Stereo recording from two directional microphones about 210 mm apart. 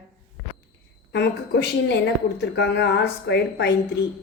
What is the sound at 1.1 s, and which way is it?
A woman's voice, 55° left (ahead or behind).